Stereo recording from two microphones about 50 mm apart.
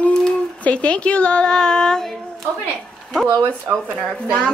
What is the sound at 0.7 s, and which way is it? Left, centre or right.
Speech, left.